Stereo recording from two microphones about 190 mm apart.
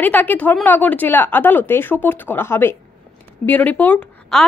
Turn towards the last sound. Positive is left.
turn(degrees=10)  # may be behind; listen again after turning